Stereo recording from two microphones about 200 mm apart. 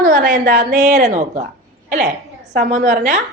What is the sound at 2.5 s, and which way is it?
Speech, 40° right (ahead or behind).